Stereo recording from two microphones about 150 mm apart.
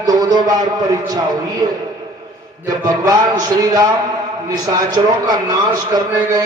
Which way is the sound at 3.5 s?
25° right (ahead or behind).